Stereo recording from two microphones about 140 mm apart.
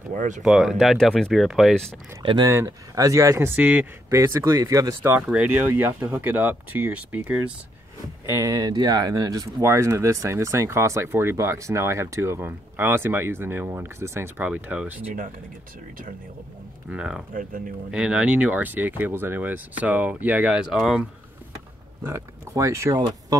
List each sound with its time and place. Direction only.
0.1 s speech: 65° right (ahead or behind)
0.4 s speech: 5° right (ahead or behind)
2.2 s speech: 30° right (ahead or behind)
5.3 s speech: 10° right (ahead or behind)
8.3 s speech: 20° right (ahead or behind)
16.9 s speech: 5° right (ahead or behind)
17.3 s speech: 75° right (ahead or behind)
17.9 s speech: 5° right (ahead or behind)
22.0 s speech: 20° right (ahead or behind)